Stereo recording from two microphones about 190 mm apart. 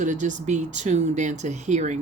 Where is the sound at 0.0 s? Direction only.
40° right (ahead or behind).